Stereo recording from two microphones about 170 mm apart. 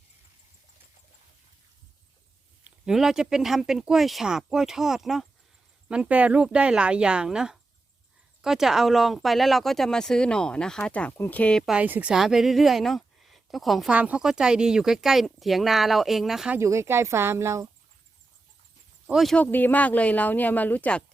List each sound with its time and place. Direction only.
2.6 s speech: 5° right (ahead or behind)
16.6 s speech: 15° right (ahead or behind)
19.0 s speech: centre (ahead or behind)